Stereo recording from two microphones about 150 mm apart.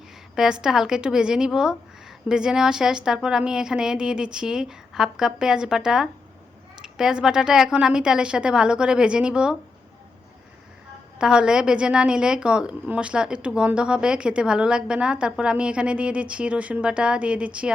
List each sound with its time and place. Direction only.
0.3 s a woman's voice: 5° right (ahead or behind)
11.2 s a woman's voice: 5° right (ahead or behind)